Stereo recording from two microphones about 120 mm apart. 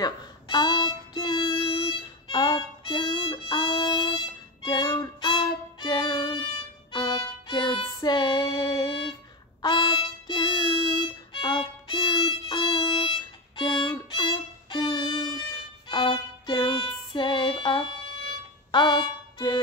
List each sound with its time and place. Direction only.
0.0 s music: 40° left (ahead or behind)
4.6 s violin: 40° left (ahead or behind)
6.9 s music: 40° left (ahead or behind)
9.6 s violin: 40° left (ahead or behind)
15.9 s music: 40° left (ahead or behind)